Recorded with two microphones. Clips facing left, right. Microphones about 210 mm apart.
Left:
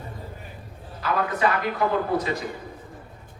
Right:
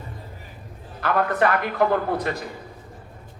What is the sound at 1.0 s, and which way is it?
A man's voice, 55° right (ahead or behind).